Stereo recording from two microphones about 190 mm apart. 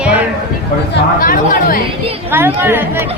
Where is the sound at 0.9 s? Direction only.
50° left (ahead or behind).